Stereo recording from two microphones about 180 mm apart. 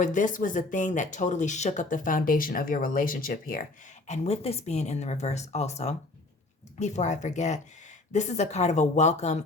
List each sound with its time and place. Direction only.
0.0 s speech: 45° left (ahead or behind)
4.0 s speech: 40° left (ahead or behind)